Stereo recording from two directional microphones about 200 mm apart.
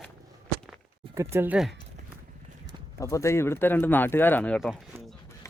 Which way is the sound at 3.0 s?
15° left (ahead or behind).